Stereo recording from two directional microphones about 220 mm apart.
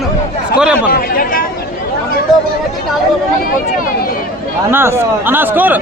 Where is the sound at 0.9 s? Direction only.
40° left (ahead or behind).